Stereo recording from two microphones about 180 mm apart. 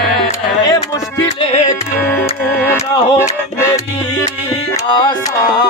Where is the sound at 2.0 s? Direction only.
10° left (ahead or behind).